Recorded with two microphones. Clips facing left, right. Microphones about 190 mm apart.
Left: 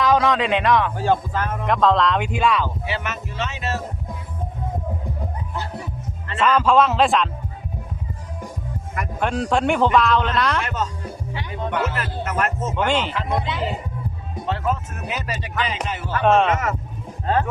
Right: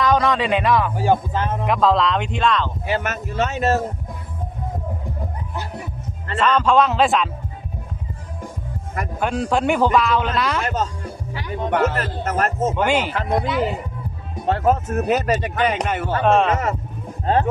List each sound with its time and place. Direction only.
0.0 s speech: centre (ahead or behind); by 1.6 s 20° right (ahead or behind)
1.6 s a man's voice: 5° right (ahead or behind)
2.8 s speech: 45° right (ahead or behind)
6.4 s a man's voice: 5° left (ahead or behind)
9.2 s a man's voice: centre (ahead or behind)
10.6 s speech: 40° right (ahead or behind)
12.7 s speech: 10° right (ahead or behind)
14.4 s speech: 45° right (ahead or behind)
16.2 s a man's voice: centre (ahead or behind)
16.5 s speech: 30° right (ahead or behind)